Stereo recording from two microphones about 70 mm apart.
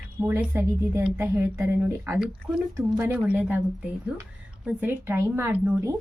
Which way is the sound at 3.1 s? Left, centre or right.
Right.